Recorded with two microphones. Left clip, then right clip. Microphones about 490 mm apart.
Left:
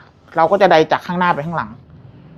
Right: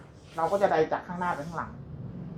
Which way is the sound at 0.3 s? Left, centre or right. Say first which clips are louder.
Left 13 dB; left.